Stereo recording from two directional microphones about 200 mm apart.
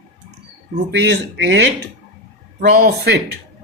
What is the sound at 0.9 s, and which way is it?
Speech, 60° right (ahead or behind).